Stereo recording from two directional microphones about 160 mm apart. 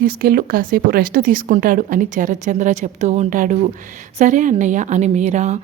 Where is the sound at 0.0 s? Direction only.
65° right (ahead or behind).